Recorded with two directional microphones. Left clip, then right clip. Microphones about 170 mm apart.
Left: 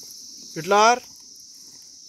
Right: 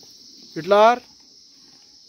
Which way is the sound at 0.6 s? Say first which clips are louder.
Right 2 dB; 20° right (ahead or behind).